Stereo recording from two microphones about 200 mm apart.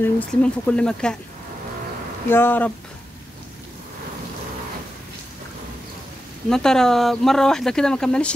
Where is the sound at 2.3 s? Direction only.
10° left (ahead or behind).